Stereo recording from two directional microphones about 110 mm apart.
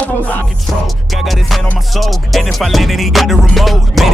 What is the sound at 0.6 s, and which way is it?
Music, centre (ahead or behind).